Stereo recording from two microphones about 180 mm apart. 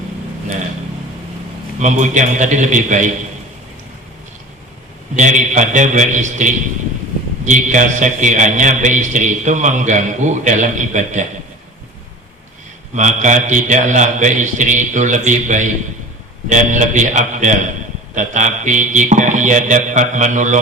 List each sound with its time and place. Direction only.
1.8 s a man's voice: 40° right (ahead or behind)
5.1 s a man's voice: 40° right (ahead or behind)
13.0 s a man's voice: 45° right (ahead or behind)